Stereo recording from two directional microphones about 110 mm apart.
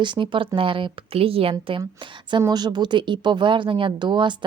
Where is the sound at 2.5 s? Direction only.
40° right (ahead or behind).